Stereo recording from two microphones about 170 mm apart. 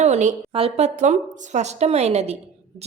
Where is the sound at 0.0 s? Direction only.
40° right (ahead or behind).